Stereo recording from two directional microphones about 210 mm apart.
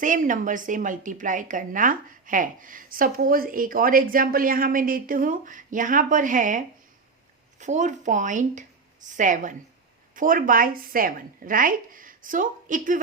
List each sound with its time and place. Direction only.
0.0 s a woman's voice: 40° right (ahead or behind)